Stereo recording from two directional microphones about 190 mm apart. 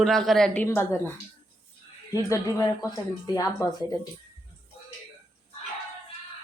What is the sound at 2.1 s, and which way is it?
Speech, 15° left (ahead or behind).